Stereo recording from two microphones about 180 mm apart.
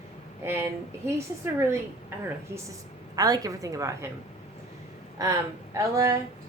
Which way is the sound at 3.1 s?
20° right (ahead or behind).